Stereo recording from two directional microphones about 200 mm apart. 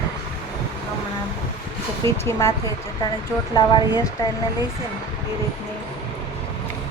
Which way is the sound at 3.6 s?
20° left (ahead or behind).